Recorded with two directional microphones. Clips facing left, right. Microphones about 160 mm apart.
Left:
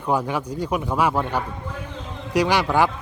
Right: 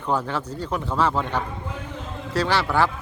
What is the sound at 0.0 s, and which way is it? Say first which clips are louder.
Speech: left 2 dB; 10° left (ahead or behind).